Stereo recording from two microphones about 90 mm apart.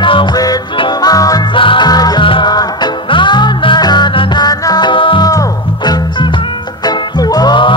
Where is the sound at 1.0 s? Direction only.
45° left (ahead or behind).